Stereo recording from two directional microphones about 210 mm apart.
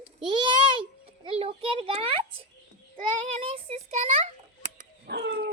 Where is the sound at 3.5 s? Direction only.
30° right (ahead or behind).